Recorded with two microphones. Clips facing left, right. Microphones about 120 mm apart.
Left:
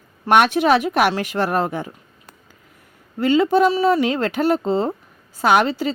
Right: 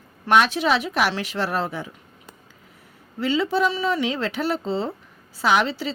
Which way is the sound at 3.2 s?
50° left (ahead or behind).